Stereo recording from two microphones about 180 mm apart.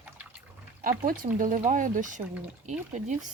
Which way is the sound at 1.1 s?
45° right (ahead or behind).